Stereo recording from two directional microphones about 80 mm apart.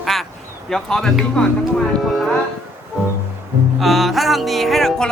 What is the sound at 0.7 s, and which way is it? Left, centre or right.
Speech, centre.